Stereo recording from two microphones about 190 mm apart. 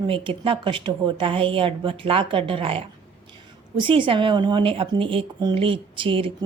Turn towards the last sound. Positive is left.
turn(degrees=-25)  # may be behind; listen again after turning